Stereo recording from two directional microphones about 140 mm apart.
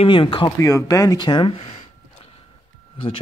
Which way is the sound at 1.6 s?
50° left (ahead or behind).